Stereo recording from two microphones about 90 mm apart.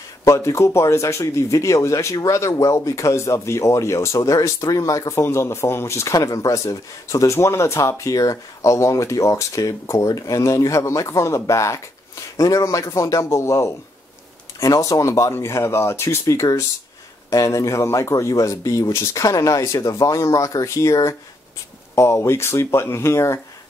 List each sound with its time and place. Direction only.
0.2 s speech: 35° left (ahead or behind)